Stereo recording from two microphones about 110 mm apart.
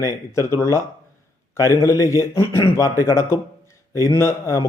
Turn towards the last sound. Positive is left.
turn(degrees=25)  # may be behind; listen again after turning